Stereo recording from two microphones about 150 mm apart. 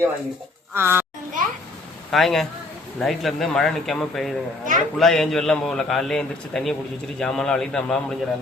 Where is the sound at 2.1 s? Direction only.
Centre (ahead or behind).